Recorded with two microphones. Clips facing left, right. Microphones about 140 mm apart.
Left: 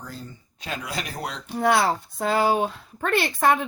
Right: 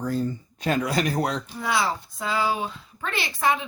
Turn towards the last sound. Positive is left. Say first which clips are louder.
# left 4 dB
turn(degrees=55)  # may be behind; listen again after turning